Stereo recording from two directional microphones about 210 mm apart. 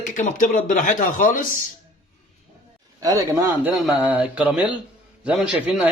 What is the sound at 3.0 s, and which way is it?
Speech, 15° right (ahead or behind).